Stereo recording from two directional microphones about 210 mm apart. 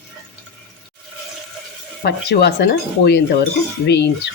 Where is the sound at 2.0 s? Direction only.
50° left (ahead or behind).